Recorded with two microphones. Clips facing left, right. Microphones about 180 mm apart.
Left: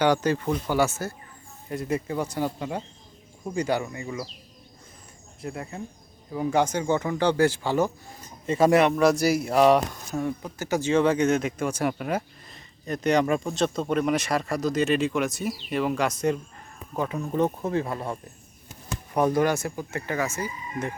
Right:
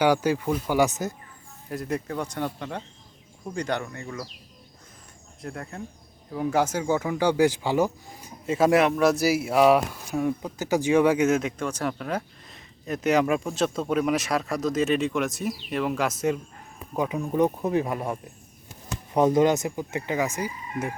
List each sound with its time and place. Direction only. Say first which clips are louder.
0.0 s speech: right 1 dB; 10° right (ahead or behind)
1.7 s speech: left 2 dB; centre (ahead or behind)
5.4 s speech: left 1 dB; 5° left (ahead or behind)